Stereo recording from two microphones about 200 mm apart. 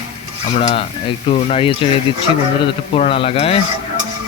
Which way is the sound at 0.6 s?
30° left (ahead or behind).